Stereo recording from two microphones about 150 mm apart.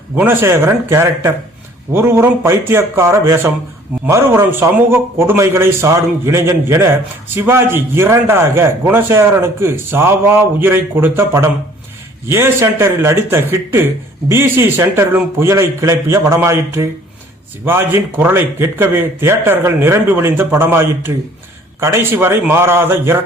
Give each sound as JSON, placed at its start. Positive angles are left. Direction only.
{"t": 0.2, "sound": "a man's voice", "side_deg": -15}